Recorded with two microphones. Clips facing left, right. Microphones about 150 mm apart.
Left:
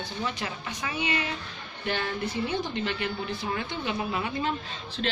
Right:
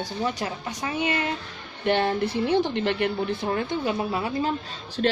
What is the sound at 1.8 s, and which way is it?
Speech, 60° right (ahead or behind).